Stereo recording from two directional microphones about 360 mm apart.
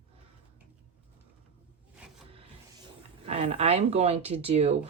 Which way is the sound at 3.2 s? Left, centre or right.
Centre.